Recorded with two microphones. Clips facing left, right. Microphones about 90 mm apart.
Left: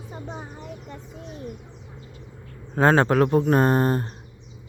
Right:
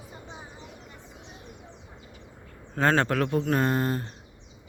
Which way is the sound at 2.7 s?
20° left (ahead or behind).